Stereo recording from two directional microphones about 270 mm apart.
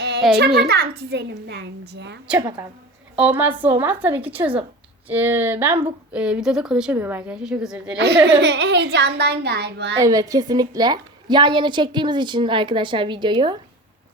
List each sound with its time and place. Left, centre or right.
0.3 s a child's voice: right
2.2 s a woman's voice: centre
7.9 s a child's voice: right
10.0 s a woman's voice: centre